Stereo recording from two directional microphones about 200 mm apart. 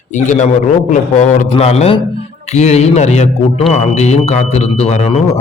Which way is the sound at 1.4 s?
30° left (ahead or behind).